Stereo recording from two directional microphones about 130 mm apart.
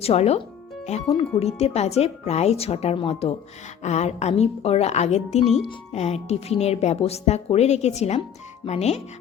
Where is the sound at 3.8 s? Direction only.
60° left (ahead or behind).